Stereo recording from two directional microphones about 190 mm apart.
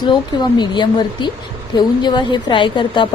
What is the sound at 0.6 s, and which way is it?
A woman's voice, 25° left (ahead or behind).